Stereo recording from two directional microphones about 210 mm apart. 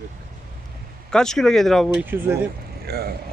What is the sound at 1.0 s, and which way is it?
Speech, 5° left (ahead or behind).